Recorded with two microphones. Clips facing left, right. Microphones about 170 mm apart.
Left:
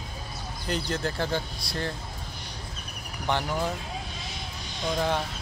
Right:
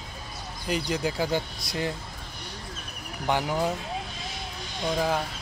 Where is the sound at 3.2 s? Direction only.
10° right (ahead or behind).